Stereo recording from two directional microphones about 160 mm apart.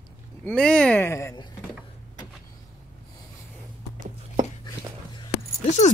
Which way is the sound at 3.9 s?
60° right (ahead or behind).